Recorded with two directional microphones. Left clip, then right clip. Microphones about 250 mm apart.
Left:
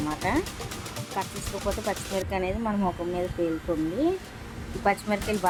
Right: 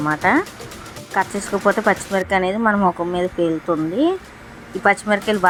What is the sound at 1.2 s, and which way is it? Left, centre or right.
Speech, centre.